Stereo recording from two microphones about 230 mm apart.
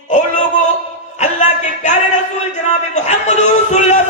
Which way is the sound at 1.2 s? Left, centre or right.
Left.